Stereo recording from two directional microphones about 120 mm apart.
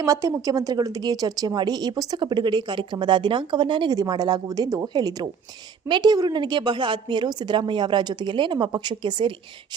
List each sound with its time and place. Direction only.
0.0 s a woman's voice: 25° right (ahead or behind)